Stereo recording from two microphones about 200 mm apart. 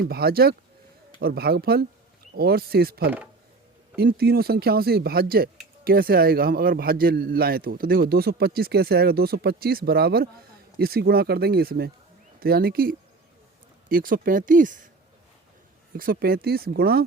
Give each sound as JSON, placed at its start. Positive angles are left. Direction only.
{"t": 0.1, "sound": "speech", "side_deg": -50}
{"t": 16.0, "sound": "speech", "side_deg": -50}